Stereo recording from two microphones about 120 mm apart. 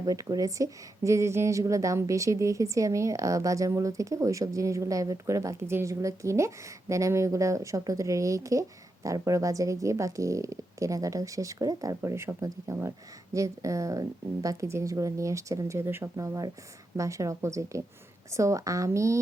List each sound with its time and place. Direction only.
0.0 s speech: 30° right (ahead or behind)